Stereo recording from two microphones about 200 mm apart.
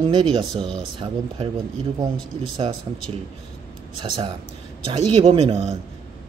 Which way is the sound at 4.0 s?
25° right (ahead or behind).